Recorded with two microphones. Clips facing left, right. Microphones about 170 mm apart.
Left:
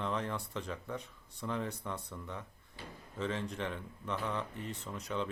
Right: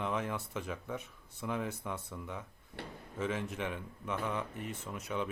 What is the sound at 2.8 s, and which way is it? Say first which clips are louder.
Drawer open or close: right 4 dB; 70° right (ahead or behind).